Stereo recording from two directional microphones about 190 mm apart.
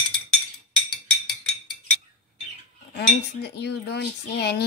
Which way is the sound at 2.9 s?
60° left (ahead or behind).